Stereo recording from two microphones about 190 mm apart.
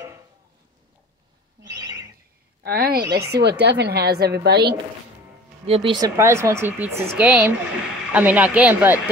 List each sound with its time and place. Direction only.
1.6 s bird: 15° right (ahead or behind)
2.6 s a woman's voice: 55° right (ahead or behind)
5.7 s speech: 25° right (ahead or behind); by 8.9 s 5° right (ahead or behind)